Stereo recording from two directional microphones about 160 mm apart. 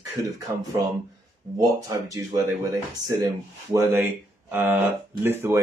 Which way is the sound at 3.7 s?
15° right (ahead or behind).